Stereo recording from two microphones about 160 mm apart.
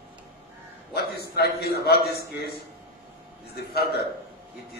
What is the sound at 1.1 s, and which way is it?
A man's voice, 80° left.